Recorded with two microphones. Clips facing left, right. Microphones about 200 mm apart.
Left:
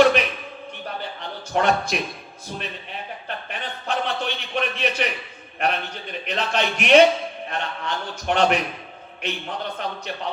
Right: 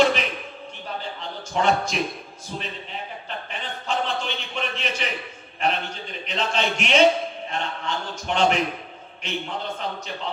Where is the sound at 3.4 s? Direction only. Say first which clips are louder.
Left 1 dB; 60° left (ahead or behind).